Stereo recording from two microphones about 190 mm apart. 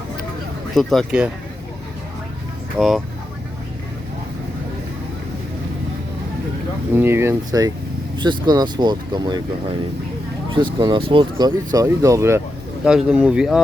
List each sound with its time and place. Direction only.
0.8 s speech: centre (ahead or behind)
2.7 s speech: centre (ahead or behind)
6.9 s speech: 10° right (ahead or behind)
10.5 s speech: 25° right (ahead or behind)
12.8 s speech: 5° right (ahead or behind)